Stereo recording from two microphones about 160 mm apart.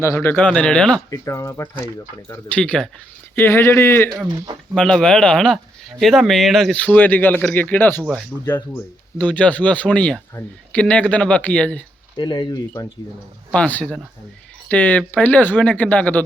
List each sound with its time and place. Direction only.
0.0 s speech: 15° left (ahead or behind)
1.1 s speech: 20° left (ahead or behind)
4.3 s speech: 25° right (ahead or behind)
4.7 s speech: 5° left (ahead or behind)
8.3 s speech: 10° right (ahead or behind)
8.7 s speech: 10° left (ahead or behind)
12.1 s speech: 25° left (ahead or behind)
13.5 s speech: 10° left (ahead or behind)